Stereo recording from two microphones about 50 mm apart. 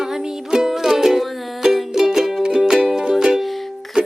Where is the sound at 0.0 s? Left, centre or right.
Centre.